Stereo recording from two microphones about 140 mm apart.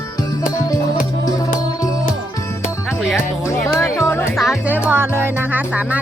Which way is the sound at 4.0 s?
20° left (ahead or behind).